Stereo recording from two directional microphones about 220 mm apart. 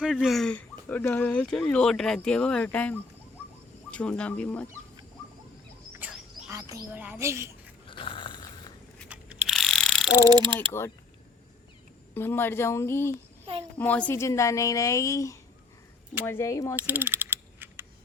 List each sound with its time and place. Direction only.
0.0 s a woman's voice: 5° right (ahead or behind)
5.9 s bird: 5° right (ahead or behind)
7.9 s a sound: 20° left (ahead or behind)
9.0 s mechanisms: 5° right (ahead or behind)
10.2 s mechanisms: 15° right (ahead or behind)
10.7 s a woman's voice: 10° left (ahead or behind)
12.1 s a woman's voice: 10° left (ahead or behind)
16.7 s mechanisms: 10° right (ahead or behind)